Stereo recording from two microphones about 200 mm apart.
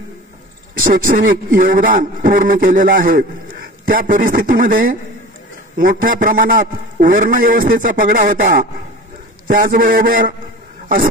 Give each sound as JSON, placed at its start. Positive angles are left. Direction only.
{"t": 0.8, "sound": "a man's voice", "side_deg": -45}